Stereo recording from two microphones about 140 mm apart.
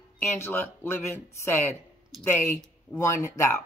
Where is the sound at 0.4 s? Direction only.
15° left (ahead or behind).